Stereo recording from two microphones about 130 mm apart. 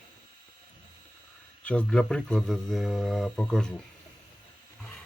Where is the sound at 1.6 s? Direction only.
5° left (ahead or behind).